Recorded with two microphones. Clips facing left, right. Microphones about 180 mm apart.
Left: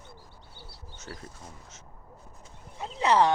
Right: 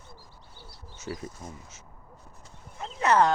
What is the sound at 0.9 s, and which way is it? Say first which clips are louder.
Speech: right 7 dB; 10° right (ahead or behind).